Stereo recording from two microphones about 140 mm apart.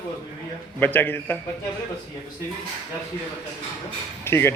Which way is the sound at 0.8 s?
15° left (ahead or behind).